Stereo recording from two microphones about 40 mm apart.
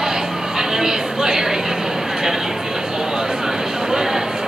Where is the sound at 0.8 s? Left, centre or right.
Centre.